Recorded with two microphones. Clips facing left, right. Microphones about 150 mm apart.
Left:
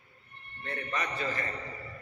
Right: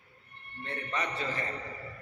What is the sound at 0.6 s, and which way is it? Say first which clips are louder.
Speech: even; 30° right (ahead or behind).